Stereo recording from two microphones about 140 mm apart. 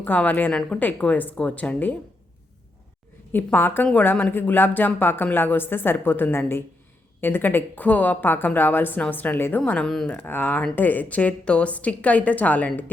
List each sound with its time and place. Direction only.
0.0 s a woman's voice: 10° left (ahead or behind)
3.3 s a woman's voice: 15° left (ahead or behind)